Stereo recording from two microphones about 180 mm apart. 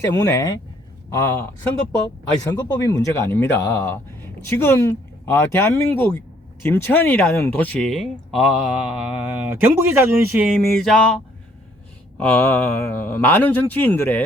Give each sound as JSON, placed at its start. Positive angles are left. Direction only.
{"t": 0.1, "sound": "speech", "side_deg": 20}
{"t": 2.5, "sound": "speech", "side_deg": 20}
{"t": 12.1, "sound": "speech", "side_deg": 5}